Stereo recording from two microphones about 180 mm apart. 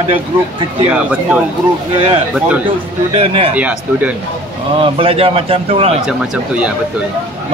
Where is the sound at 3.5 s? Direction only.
10° right (ahead or behind).